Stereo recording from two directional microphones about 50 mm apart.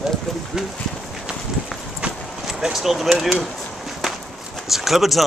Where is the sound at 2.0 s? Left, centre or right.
Right.